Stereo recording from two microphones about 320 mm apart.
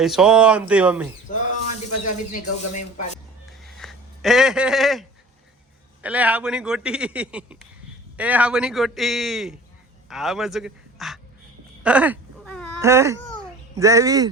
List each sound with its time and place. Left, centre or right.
0.0 s speech: centre
1.3 s speech: left
3.6 s a sound: centre
6.0 s speech: centre
11.8 s a sound: centre
12.8 s speech: centre